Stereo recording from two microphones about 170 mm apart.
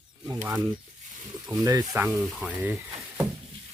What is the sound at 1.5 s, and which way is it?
Speech, 20° right (ahead or behind).